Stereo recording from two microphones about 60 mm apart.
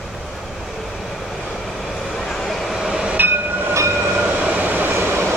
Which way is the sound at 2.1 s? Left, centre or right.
Centre.